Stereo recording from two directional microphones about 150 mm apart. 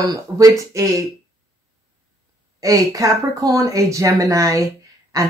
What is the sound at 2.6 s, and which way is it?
Speech, 25° right (ahead or behind).